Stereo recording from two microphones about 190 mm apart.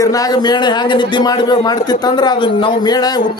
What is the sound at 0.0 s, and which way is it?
A man's voice, 20° left (ahead or behind).